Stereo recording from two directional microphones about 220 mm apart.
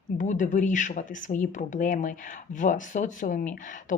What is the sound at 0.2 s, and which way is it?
Speech, 35° left (ahead or behind).